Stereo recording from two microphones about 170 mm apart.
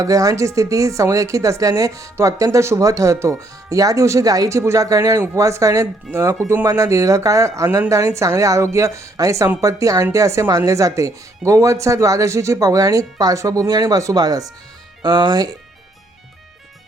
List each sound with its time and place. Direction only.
0.0 s speech: 20° right (ahead or behind)